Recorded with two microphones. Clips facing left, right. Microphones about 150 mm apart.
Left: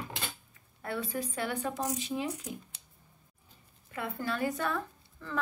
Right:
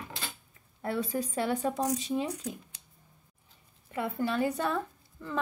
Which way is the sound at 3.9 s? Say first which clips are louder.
Right 4 dB; 25° right (ahead or behind).